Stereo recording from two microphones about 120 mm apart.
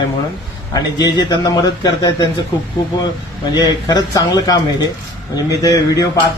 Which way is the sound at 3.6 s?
35° left (ahead or behind).